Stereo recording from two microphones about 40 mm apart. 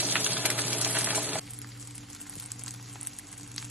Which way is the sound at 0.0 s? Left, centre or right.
Right.